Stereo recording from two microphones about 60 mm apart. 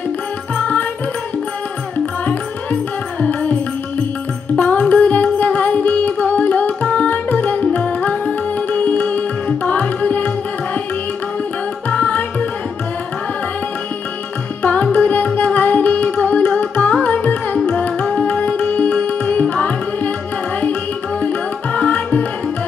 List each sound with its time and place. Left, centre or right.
2.2 s music: left
4.6 s music: left
9.7 s tabla: left
11.9 s tabla: left
14.6 s carnatic music: left
17.0 s music: left
21.2 s tabla: left